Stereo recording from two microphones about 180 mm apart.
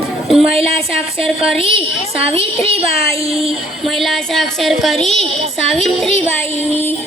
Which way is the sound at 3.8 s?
Centre (ahead or behind).